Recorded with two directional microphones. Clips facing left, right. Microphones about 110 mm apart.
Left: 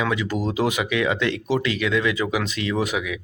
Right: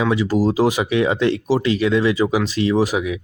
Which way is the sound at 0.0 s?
30° right (ahead or behind).